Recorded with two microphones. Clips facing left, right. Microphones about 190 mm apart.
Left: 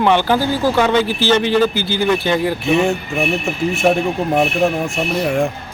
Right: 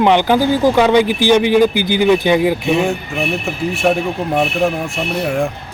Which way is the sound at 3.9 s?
Centre (ahead or behind).